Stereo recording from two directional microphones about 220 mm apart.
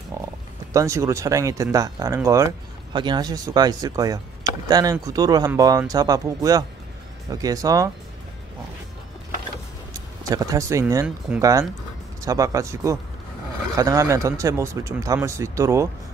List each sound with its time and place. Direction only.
0.7 s speech: 15° right (ahead or behind)
10.3 s speech: 15° right (ahead or behind)